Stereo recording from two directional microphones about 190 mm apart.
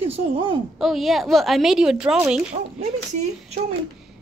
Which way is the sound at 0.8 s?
Centre (ahead or behind).